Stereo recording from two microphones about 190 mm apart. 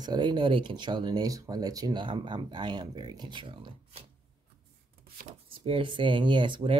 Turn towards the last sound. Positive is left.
turn(degrees=-25)  # may be behind; listen again after turning